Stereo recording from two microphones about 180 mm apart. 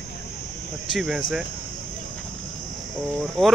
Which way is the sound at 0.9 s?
Centre (ahead or behind).